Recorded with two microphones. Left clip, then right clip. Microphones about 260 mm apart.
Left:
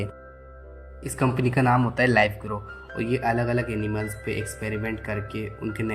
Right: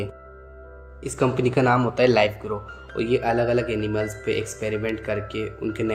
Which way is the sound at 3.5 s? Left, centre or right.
Left.